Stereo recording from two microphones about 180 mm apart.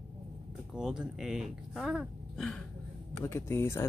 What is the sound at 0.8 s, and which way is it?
Speech, 5° right (ahead or behind).